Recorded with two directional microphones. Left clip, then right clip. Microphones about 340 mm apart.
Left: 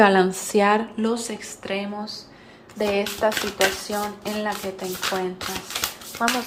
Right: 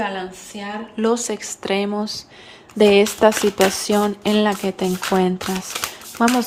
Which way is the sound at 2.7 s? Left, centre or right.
Right.